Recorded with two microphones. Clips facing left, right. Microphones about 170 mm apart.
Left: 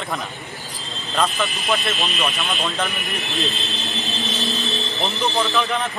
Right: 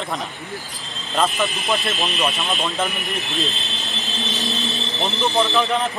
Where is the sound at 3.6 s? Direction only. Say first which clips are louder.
Left 3 dB; centre (ahead or behind).